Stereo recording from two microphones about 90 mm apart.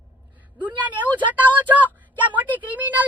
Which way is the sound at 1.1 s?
20° right (ahead or behind).